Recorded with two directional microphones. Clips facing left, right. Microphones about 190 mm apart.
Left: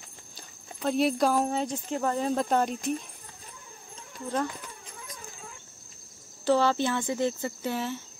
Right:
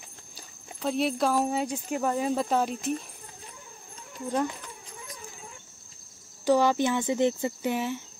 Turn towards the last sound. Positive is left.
turn(degrees=-15)  # may be behind; listen again after turning